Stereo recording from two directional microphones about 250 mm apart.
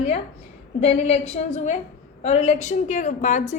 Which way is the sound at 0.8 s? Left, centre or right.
Left.